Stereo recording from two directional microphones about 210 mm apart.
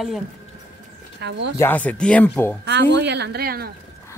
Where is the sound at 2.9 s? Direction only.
55° right (ahead or behind).